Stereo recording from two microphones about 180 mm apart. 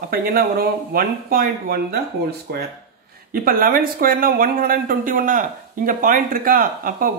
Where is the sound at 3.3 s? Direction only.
55° right (ahead or behind).